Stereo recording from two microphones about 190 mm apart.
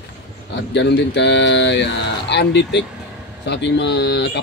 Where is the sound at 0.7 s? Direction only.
65° left (ahead or behind).